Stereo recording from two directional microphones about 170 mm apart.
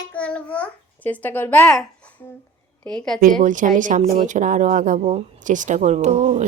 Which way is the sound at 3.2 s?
50° right (ahead or behind).